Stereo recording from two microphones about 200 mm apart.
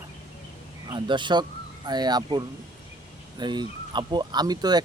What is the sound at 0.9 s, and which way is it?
Speech, 25° right (ahead or behind).